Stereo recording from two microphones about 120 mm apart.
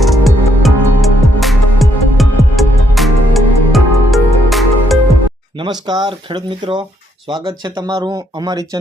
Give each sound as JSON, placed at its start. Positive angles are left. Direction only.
{"t": 0.0, "sound": "music", "side_deg": 0}
{"t": 5.5, "sound": "speech", "side_deg": -40}